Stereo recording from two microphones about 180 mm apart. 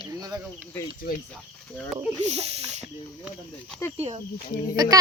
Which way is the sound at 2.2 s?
35° right (ahead or behind).